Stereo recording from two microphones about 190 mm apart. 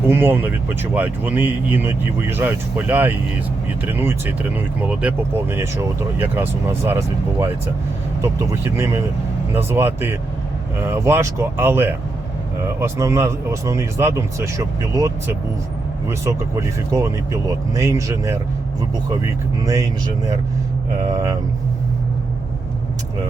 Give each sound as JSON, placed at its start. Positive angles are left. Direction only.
{"t": 0.1, "sound": "speech", "side_deg": -10}
{"t": 21.1, "sound": "speech", "side_deg": -15}